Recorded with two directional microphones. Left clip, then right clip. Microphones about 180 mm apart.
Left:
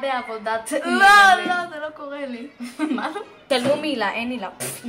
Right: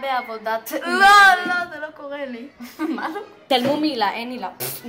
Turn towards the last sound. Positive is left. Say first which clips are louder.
# left 1 dB
turn(degrees=-20)  # may be behind; listen again after turning